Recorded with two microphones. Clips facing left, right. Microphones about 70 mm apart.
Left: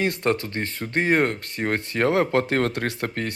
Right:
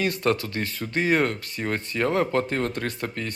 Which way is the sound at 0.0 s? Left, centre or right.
Left.